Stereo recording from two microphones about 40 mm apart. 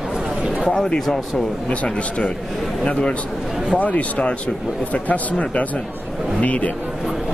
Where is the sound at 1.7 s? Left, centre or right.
Left.